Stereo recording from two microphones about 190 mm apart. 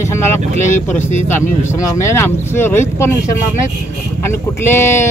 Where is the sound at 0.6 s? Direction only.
40° left (ahead or behind).